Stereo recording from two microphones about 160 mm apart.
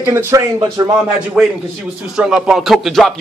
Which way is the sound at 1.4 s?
5° right (ahead or behind).